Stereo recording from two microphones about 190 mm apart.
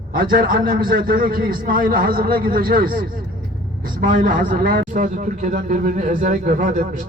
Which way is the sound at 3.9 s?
45° right (ahead or behind).